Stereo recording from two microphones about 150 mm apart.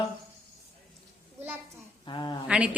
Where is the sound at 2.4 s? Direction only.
5° right (ahead or behind).